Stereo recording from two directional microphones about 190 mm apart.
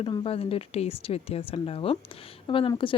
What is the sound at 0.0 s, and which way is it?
A woman's voice, 25° left (ahead or behind).